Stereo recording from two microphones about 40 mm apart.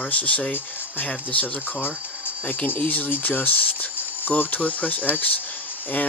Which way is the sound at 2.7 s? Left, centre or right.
Left.